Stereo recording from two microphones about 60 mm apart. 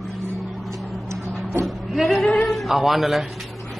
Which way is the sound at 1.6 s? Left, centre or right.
Centre.